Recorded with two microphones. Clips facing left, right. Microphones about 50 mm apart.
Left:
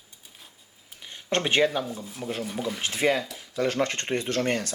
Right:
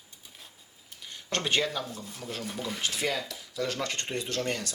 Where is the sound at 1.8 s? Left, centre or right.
Centre.